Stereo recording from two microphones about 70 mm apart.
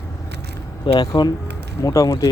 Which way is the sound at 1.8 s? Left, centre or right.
Left.